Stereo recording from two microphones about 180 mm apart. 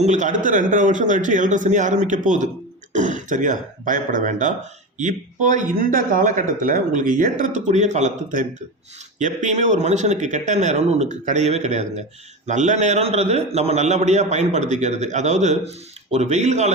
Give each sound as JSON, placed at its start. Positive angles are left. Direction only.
{"t": 0.0, "sound": "speech", "side_deg": -40}